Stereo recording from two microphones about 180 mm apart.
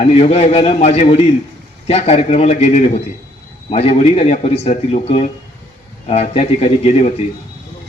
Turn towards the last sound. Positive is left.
turn(degrees=35)  # may be behind; listen again after turning